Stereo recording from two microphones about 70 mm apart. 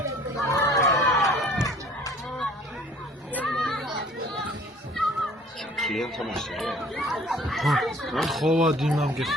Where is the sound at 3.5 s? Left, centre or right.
Centre.